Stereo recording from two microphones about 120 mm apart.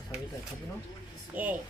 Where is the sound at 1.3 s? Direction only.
15° right (ahead or behind).